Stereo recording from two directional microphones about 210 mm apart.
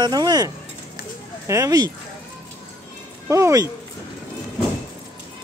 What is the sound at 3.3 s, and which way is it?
Speech, 15° right (ahead or behind).